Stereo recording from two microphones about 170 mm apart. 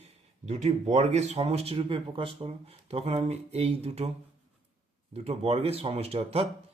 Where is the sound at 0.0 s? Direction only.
40° right (ahead or behind).